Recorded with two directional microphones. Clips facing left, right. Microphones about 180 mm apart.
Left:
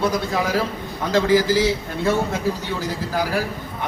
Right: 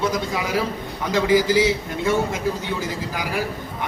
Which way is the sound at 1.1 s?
15° right (ahead or behind).